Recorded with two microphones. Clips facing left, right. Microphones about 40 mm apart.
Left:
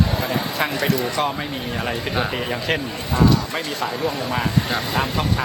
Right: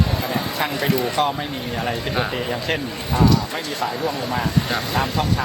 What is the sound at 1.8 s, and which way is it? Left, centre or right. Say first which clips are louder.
Speech: even; centre.